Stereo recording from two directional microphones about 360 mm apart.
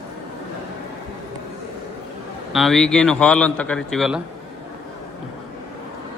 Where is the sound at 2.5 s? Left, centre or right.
Centre.